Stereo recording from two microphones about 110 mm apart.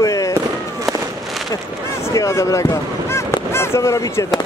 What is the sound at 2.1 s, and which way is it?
Speech, 30° left (ahead or behind).